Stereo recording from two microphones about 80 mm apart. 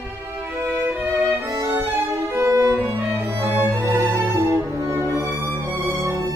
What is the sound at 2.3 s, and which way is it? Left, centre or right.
Violin, right.